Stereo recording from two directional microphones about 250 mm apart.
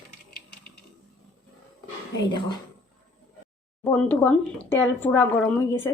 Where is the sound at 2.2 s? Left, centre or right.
Centre.